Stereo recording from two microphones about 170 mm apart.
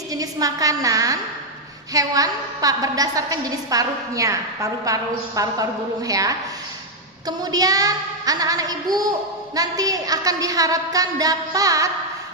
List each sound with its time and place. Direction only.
0.1 s a woman's voice: 20° right (ahead or behind)